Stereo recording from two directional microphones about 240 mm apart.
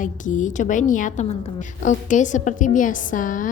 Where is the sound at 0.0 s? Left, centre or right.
Left.